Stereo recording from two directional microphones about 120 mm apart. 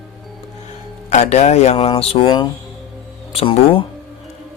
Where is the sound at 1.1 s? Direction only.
65° left (ahead or behind).